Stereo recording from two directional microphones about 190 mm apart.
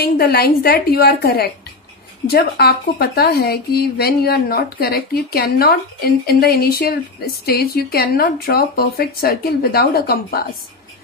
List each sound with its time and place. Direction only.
0.0 s speech: 55° left (ahead or behind)